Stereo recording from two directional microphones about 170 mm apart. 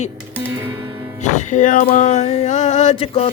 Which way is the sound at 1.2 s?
45° left (ahead or behind).